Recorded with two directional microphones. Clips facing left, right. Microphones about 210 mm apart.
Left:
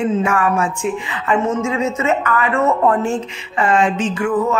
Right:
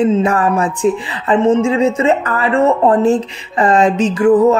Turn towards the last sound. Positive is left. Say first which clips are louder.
# right 8 dB
turn(degrees=-35)  # may be behind; listen again after turning